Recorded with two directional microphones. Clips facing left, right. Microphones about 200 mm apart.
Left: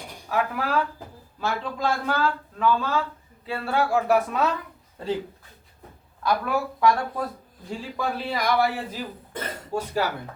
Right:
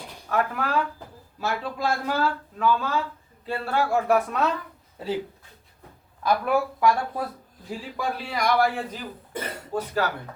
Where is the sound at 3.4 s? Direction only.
Centre (ahead or behind).